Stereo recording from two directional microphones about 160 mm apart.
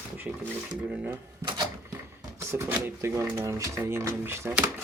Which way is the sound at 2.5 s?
15° right (ahead or behind).